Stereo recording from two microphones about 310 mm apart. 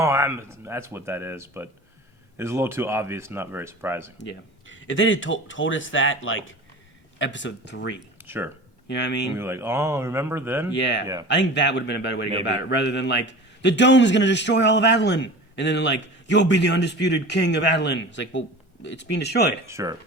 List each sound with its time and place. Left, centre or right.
0.0 s speech: centre
4.2 s a man's voice: left
8.2 s a sound: centre
8.9 s a man's voice: left
9.4 s speech: centre
10.8 s a man's voice: left
11.0 s speech: centre
11.3 s a man's voice: left
19.6 s speech: centre